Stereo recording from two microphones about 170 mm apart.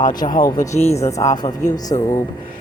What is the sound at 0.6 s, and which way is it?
Speech, 40° left (ahead or behind).